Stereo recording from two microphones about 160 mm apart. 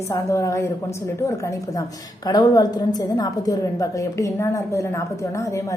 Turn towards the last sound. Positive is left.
turn(degrees=15)  # may be behind; listen again after turning